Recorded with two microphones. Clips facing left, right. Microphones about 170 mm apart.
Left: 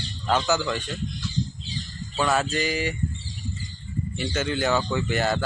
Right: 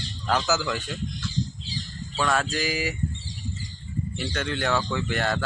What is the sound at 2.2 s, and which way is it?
Speech, 5° left (ahead or behind).